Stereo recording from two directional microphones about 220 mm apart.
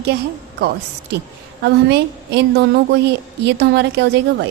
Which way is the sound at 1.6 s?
50° right (ahead or behind).